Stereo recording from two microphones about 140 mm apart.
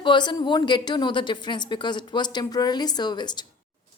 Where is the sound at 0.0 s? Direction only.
35° left (ahead or behind).